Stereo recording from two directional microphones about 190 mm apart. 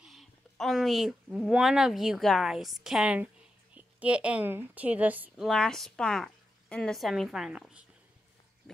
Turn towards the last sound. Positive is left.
turn(degrees=-5)  # may be behind; listen again after turning